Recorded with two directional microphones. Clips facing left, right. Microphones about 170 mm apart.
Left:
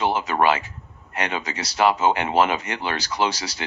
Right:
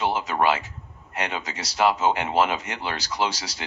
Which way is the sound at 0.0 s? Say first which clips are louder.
Left 2 dB; 60° left (ahead or behind).